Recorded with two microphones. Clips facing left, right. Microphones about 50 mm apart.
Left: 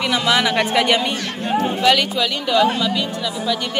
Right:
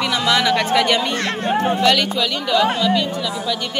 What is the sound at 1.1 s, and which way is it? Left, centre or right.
Speech, right.